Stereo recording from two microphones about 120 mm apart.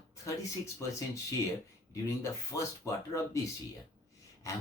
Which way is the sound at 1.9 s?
25° left (ahead or behind).